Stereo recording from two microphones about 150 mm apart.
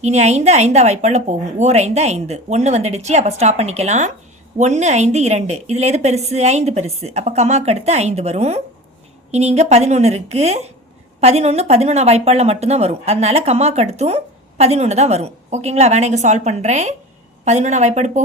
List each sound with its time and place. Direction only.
0.0 s a woman's voice: 50° right (ahead or behind)